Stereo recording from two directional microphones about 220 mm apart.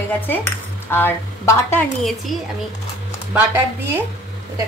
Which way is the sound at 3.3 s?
10° right (ahead or behind).